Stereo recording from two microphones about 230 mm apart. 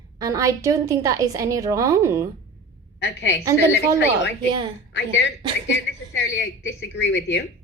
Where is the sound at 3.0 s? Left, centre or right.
Left.